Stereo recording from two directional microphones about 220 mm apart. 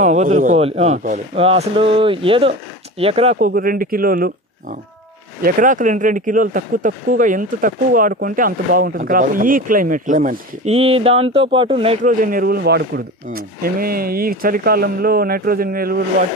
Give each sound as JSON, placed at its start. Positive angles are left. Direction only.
{"t": 0.0, "sound": "a man's voice", "side_deg": -30}
{"t": 3.3, "sound": "speech", "side_deg": -40}
{"t": 12.1, "sound": "speech", "side_deg": -40}